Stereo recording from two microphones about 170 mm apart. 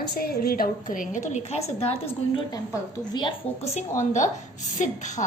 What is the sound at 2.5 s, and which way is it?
Speech, 25° left (ahead or behind).